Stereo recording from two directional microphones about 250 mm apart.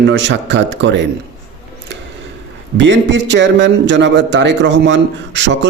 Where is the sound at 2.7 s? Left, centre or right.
Right.